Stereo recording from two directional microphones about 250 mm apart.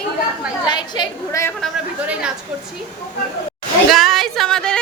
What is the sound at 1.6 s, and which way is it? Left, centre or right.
Speech, centre.